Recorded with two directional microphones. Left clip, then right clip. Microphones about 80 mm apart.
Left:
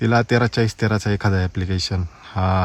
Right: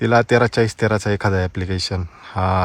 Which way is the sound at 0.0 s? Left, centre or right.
Left.